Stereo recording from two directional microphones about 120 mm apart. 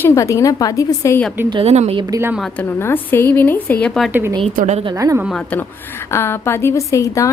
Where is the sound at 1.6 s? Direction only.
65° right (ahead or behind).